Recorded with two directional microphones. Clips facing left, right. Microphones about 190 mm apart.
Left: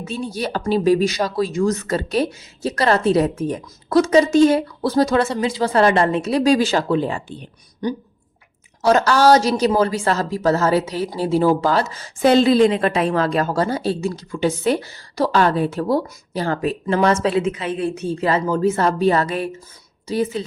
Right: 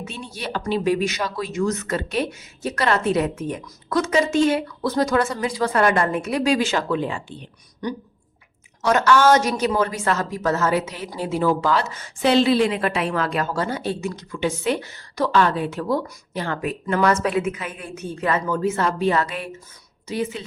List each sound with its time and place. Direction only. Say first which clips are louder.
0.0 s a woman's voice: left 7 dB; 40° left (ahead or behind)
8.8 s a woman's voice: left 2 dB; 35° left (ahead or behind)